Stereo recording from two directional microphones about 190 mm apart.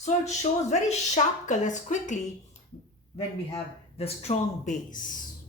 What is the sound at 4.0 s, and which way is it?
Speech, 30° left (ahead or behind).